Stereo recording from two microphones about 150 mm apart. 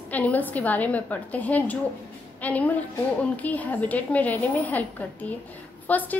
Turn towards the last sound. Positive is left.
turn(degrees=10)  # may be behind; listen again after turning